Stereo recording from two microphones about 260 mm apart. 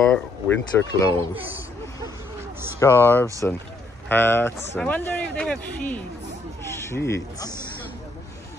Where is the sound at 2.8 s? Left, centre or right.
Centre.